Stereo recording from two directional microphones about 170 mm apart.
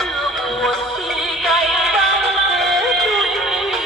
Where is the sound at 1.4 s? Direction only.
Centre (ahead or behind).